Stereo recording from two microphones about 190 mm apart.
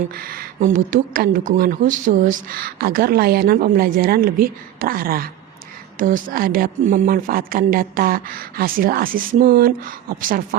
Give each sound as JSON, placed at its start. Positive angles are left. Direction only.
{"t": 0.1, "sound": "speech", "side_deg": -50}